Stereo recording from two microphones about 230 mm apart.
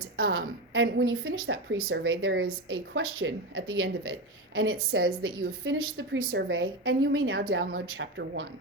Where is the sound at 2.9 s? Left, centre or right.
Right.